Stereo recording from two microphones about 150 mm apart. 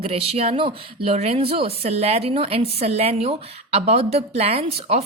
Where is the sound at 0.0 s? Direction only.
40° right (ahead or behind).